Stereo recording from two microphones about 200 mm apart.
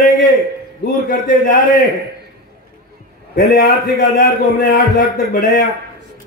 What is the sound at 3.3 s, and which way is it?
A man's voice, 45° left (ahead or behind).